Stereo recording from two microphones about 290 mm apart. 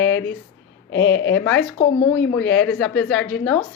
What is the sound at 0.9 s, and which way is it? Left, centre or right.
Speech, left.